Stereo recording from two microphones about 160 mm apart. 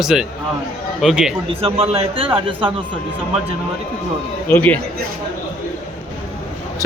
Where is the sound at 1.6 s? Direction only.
40° right (ahead or behind).